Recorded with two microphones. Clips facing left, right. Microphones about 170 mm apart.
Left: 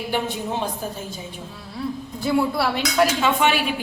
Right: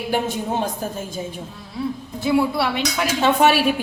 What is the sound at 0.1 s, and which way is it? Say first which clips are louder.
Speech: right 3 dB; 45° right (ahead or behind).